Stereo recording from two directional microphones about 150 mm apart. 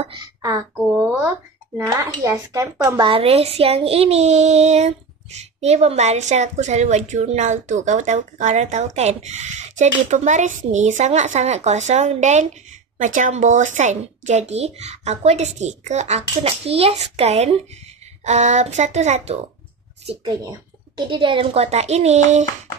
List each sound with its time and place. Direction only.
0.2 s a sound: 25° right (ahead or behind)
1.8 s speech: 20° right (ahead or behind)
3.0 s speech: 35° right (ahead or behind)
20.2 s a woman's voice: 30° right (ahead or behind); by 22.5 s 50° right (ahead or behind)